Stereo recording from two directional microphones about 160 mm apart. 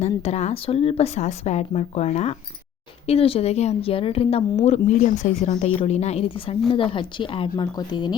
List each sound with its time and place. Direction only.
0.0 s a woman's voice: 45° left (ahead or behind)
4.9 s a woman's voice: 55° left (ahead or behind); by 8.1 s 25° left (ahead or behind)